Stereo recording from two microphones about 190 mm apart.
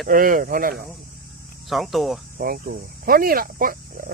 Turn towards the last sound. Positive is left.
turn(degrees=-45)  # may be behind; listen again after turning